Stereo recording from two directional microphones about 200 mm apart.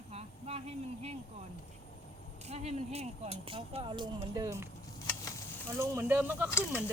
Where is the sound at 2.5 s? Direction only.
30° right (ahead or behind); by 4.6 s 15° right (ahead or behind).